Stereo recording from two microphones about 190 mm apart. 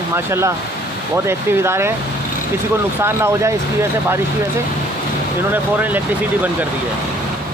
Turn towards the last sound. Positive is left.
turn(degrees=-10)  # may be behind; listen again after turning